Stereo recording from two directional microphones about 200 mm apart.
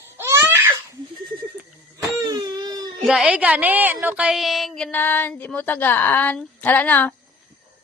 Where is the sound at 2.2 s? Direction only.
20° right (ahead or behind).